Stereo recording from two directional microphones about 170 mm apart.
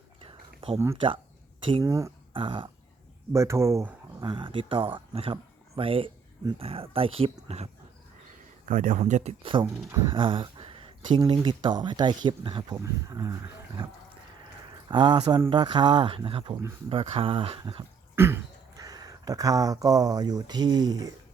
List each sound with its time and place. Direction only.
0.3 s a sound: 35° right (ahead or behind)
1.8 s speech: 20° right (ahead or behind)
2.3 s speech: 30° right (ahead or behind)
3.3 s speech: 15° right (ahead or behind)
4.3 s speech: 30° right (ahead or behind)
8.6 s speech: 50° right (ahead or behind)
9.0 s speech: 40° right (ahead or behind)
9.4 s speech: 30° right (ahead or behind)
14.8 s speech: 30° right (ahead or behind)
18.1 s speech: 15° right (ahead or behind)